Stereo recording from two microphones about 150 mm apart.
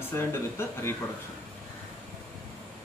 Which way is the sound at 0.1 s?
15° left (ahead or behind).